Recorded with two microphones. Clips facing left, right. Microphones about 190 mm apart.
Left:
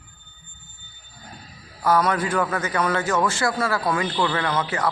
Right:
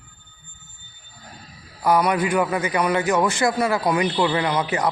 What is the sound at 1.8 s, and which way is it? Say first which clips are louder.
A man's voice: right 2 dB; 15° right (ahead or behind).